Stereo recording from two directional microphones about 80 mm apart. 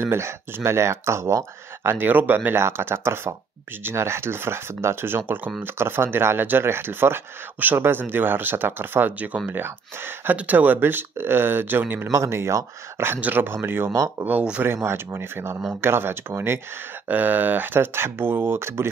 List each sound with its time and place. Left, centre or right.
0.0 s speech: right
1.8 s speech: right
12.1 s speech: right
13.9 s speech: right
14.6 s speech: right